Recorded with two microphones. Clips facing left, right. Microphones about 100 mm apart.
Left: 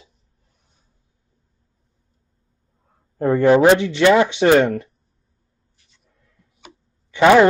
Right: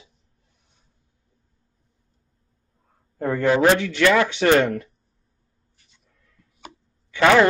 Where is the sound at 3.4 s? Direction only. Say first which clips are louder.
Left 5 dB; 25° left (ahead or behind).